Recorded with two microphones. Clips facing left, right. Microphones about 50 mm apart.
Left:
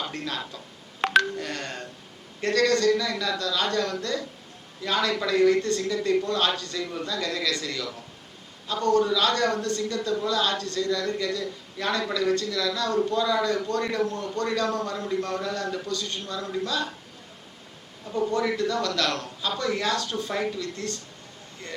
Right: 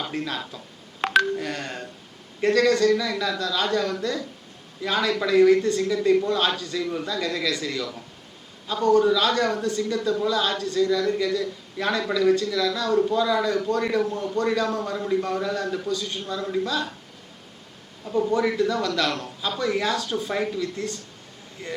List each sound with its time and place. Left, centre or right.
0.0 s a man's voice: centre
18.0 s a man's voice: centre